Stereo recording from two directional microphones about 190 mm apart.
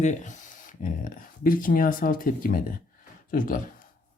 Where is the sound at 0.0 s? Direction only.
40° left (ahead or behind).